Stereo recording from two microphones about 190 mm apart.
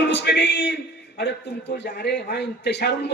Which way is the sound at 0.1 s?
70° left (ahead or behind).